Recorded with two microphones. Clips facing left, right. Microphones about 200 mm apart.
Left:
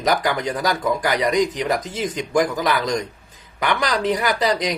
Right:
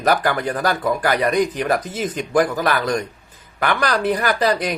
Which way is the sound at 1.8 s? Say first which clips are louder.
Right 1 dB; 10° right (ahead or behind).